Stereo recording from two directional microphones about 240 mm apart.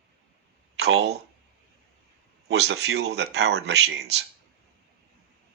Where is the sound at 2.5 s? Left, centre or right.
Right.